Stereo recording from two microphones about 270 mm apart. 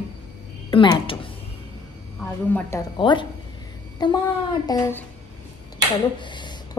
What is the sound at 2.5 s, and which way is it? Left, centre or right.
A woman's voice, centre.